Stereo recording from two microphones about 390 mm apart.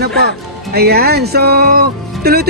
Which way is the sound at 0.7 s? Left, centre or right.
Right.